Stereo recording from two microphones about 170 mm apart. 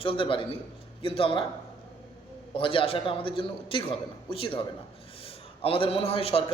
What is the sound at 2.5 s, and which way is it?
A man's voice, 30° left (ahead or behind).